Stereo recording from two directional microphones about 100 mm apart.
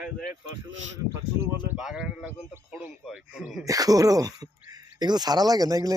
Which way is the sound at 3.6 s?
35° right (ahead or behind).